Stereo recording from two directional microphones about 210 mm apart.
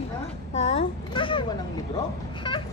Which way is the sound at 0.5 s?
30° left (ahead or behind).